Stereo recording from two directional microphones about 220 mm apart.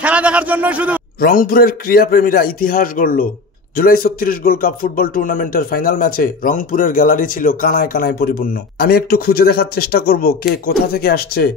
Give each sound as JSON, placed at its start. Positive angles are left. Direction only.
{"t": 0.0, "sound": "speech", "side_deg": -5}
{"t": 1.2, "sound": "a man's voice", "side_deg": 40}